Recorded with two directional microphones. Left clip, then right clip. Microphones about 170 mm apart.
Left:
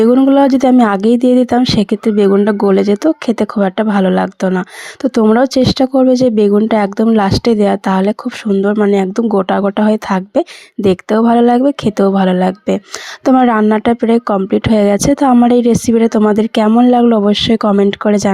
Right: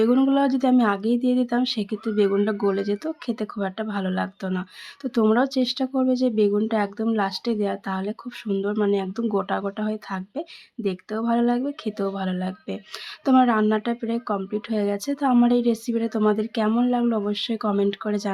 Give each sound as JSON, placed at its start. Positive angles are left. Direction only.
{"t": 0.3, "sound": "speech", "side_deg": 40}